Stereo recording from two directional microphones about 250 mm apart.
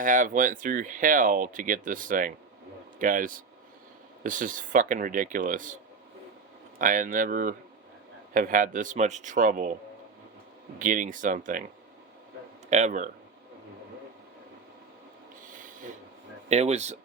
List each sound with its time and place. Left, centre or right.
0.0 s speech: right
10.8 s speech: right
12.7 s speech: right
15.4 s a sound: right
16.5 s speech: right